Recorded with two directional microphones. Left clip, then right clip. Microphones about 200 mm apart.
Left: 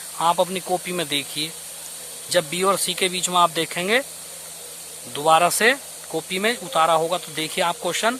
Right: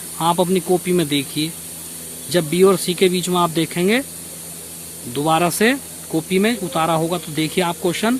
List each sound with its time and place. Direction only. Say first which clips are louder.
0.2 s speech: right 2 dB; 10° left (ahead or behind)
5.1 s speech: left 1 dB; 15° left (ahead or behind)